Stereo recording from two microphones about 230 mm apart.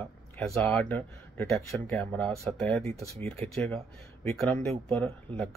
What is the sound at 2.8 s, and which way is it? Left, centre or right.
Speech, right.